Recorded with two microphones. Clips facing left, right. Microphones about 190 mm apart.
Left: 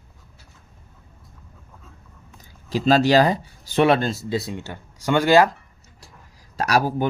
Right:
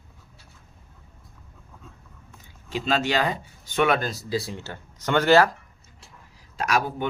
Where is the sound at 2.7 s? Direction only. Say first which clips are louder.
Left 8 dB; 40° left (ahead or behind); by 5.5 s 15° left (ahead or behind).